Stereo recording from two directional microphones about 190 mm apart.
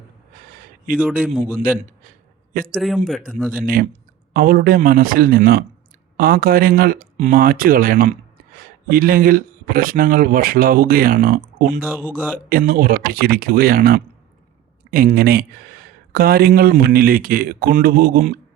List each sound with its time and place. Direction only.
0.3 s a sound: 45° right (ahead or behind)
1.2 s speech: 5° right (ahead or behind)
2.7 s speech: centre (ahead or behind)
4.4 s speech: 50° right (ahead or behind)
11.8 s speech: 10° right (ahead or behind)
12.5 s speech: 50° right (ahead or behind)